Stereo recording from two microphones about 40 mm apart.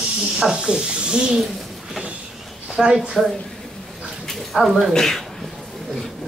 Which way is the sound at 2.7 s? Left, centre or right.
Centre.